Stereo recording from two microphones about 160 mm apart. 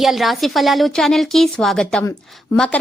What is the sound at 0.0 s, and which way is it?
A woman's voice, centre (ahead or behind).